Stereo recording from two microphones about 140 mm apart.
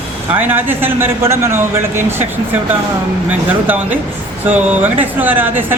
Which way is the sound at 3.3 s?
15° right (ahead or behind).